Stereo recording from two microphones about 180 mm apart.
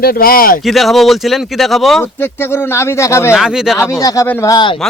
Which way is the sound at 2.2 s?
10° left (ahead or behind).